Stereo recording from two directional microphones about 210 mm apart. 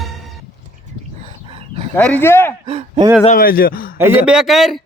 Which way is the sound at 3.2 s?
40° left (ahead or behind).